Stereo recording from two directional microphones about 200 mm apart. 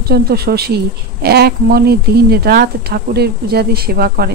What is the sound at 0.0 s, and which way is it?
Speech, 50° right (ahead or behind).